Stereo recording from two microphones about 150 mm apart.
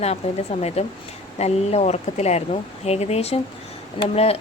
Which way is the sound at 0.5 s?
40° left (ahead or behind).